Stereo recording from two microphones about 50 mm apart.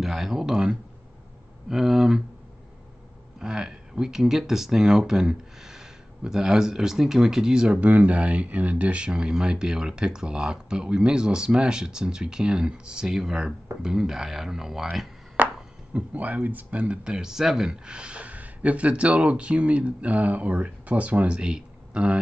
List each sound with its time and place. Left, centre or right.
0.0 s speech: centre
3.3 s speech: centre
15.4 s a sound: right
15.9 s speech: right